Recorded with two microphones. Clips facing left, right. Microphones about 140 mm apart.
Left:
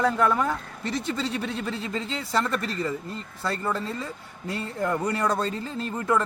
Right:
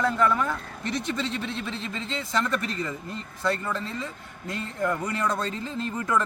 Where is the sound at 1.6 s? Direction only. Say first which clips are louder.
Left 3 dB; 40° left (ahead or behind).